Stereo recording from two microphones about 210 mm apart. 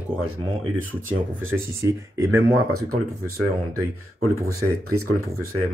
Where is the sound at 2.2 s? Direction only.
85° right.